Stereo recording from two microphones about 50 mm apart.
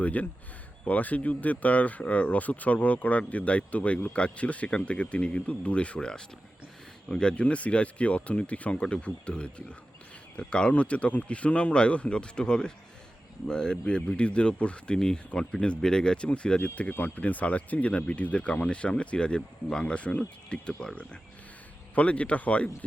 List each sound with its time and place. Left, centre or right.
0.0 s speech: left
7.1 s speech: centre
21.9 s speech: left